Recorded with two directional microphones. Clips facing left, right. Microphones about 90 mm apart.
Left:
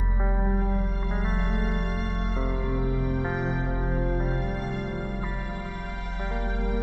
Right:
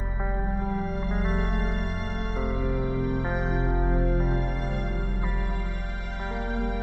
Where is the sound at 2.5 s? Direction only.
20° left (ahead or behind).